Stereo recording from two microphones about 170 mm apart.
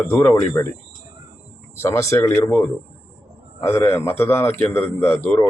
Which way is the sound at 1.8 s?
15° left (ahead or behind).